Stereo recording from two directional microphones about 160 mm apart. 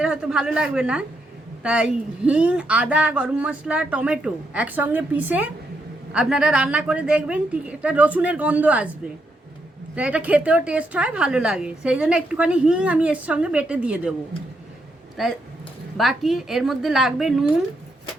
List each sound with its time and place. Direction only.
0.0 s a woman's voice: 5° right (ahead or behind)
9.9 s a woman's voice: 5° right (ahead or behind)
15.1 s a woman's voice: centre (ahead or behind)